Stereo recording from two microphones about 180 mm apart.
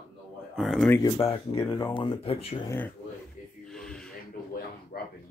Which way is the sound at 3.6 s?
5° left (ahead or behind).